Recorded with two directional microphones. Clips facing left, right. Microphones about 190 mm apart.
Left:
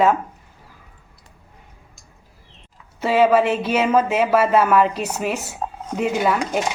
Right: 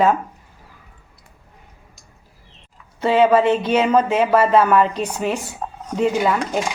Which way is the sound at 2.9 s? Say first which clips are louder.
Right 1 dB; 5° left (ahead or behind).